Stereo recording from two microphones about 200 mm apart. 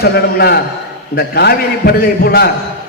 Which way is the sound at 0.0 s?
50° left (ahead or behind).